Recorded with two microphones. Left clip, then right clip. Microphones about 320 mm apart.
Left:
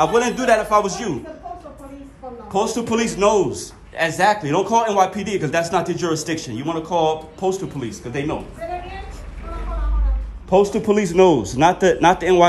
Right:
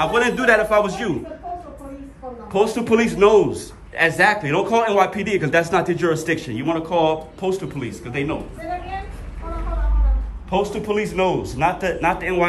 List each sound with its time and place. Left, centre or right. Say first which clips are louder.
0.0 s a man's voice: even; centre
2.5 s a man's voice: right 3 dB; centre
10.9 s speech: left 6 dB; centre